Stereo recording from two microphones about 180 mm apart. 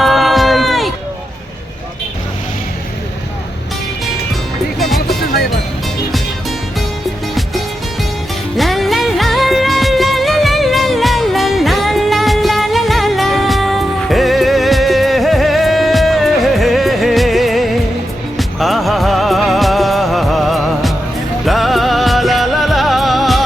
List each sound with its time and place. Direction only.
0.0 s a sound: centre (ahead or behind)
4.8 s music: centre (ahead or behind)
8.5 s music: centre (ahead or behind)